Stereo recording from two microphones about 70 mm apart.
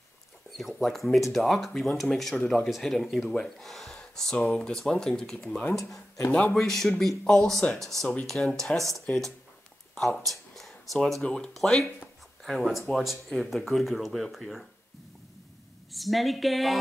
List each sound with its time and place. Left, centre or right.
0.6 s speech: centre
2.3 s speech: centre
2.6 s speech: centre
5.8 s speech: left
6.5 s speech: centre
9.1 s speech: left
9.9 s speech: centre
11.2 s speech: centre
15.9 s speech: centre